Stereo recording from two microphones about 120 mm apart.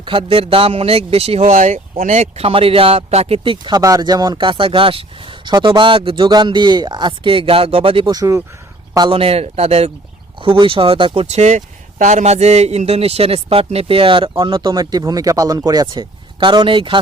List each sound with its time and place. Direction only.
0.0 s speech: 45° right (ahead or behind)
3.8 s speech: 30° right (ahead or behind); by 8.1 s 50° right (ahead or behind)
8.1 s speech: 30° right (ahead or behind)
9.0 s speech: 45° right (ahead or behind)
10.4 s speech: 45° right (ahead or behind)
11.3 s speech: 70° right (ahead or behind); by 14.7 s 45° right (ahead or behind)
14.7 s speech: 35° right (ahead or behind)